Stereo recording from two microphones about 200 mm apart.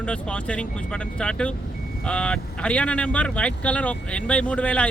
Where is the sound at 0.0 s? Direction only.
5° left (ahead or behind).